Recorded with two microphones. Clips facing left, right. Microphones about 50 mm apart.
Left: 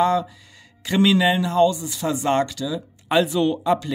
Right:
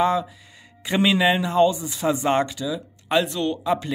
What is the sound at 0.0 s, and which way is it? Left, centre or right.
Speech, centre.